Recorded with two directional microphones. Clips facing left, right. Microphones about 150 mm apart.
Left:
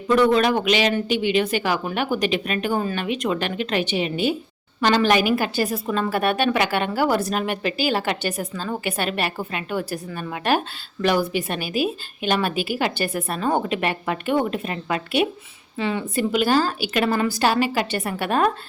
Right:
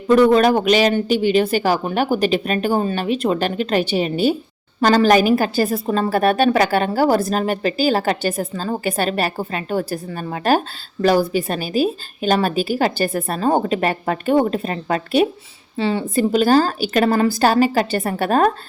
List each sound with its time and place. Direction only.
0.1 s a woman's voice: 40° right (ahead or behind)